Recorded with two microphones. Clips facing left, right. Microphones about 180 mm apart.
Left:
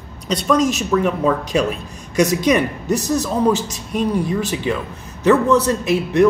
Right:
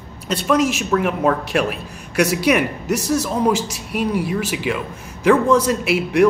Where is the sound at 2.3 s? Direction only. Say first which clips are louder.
Left 1 dB; 10° right (ahead or behind).